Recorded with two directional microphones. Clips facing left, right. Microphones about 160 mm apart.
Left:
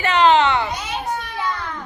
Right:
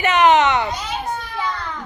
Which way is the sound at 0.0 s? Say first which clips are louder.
Right 1 dB; 20° right (ahead or behind).